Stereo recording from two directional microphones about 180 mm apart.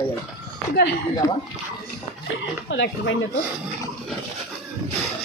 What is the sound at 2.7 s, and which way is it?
Speech, 80° left.